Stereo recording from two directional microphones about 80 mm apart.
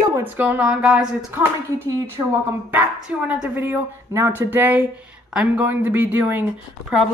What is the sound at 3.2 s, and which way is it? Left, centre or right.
Speech, centre.